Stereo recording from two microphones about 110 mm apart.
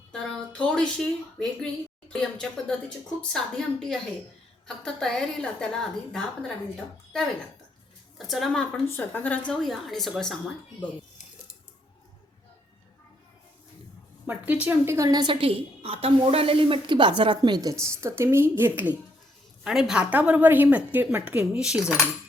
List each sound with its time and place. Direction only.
0.1 s a woman's voice: 10° left (ahead or behind)
8.3 s a woman's voice: centre (ahead or behind)
8.9 s speech: 15° left (ahead or behind)
9.5 s a woman's voice: 5° left (ahead or behind)
14.3 s speech: 15° right (ahead or behind); by 15.3 s 35° right (ahead or behind)
15.3 s a woman's voice: 55° right (ahead or behind); by 18.9 s 20° right (ahead or behind)
19.6 s a woman's voice: 5° right (ahead or behind)